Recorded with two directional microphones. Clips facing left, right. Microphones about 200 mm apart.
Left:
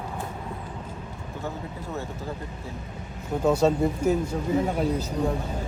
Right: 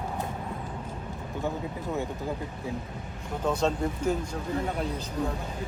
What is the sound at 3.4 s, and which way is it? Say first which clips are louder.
Speech: left 6 dB; 10° left (ahead or behind).